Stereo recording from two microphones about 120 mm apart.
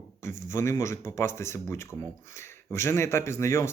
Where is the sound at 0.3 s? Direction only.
25° left (ahead or behind).